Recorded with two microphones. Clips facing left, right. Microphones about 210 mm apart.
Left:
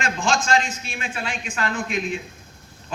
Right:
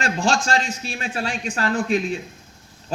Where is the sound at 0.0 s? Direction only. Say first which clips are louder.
Right 2 dB; 40° right (ahead or behind).